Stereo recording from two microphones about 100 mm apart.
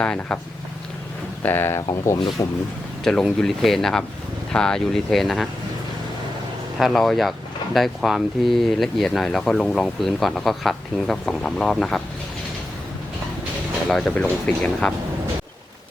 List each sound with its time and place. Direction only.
0.0 s speech: 10° left (ahead or behind)
1.5 s speech: 20° left (ahead or behind)
2.4 s speech: 35° left (ahead or behind)
3.0 s speech: 5° left (ahead or behind)
6.7 s speech: centre (ahead or behind)
14.0 s speech: 15° left (ahead or behind)